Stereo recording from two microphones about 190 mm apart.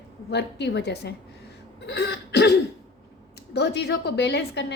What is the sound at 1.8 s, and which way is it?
Throat clearing, 65° left (ahead or behind).